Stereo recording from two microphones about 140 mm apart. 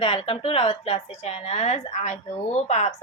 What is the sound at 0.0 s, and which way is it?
Speech, 40° left (ahead or behind).